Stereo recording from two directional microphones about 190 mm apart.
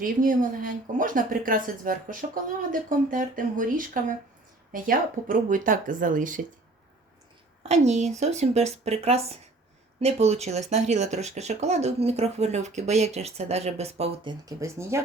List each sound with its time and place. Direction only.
0.0 s speech: 45° right (ahead or behind)
7.6 s speech: 35° right (ahead or behind)
14.4 s speech: 15° right (ahead or behind)